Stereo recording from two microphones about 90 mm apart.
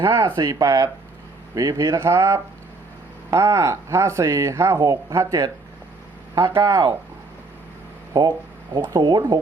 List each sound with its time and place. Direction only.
0.0 s speech: 30° right (ahead or behind)
8.1 s speech: 45° right (ahead or behind)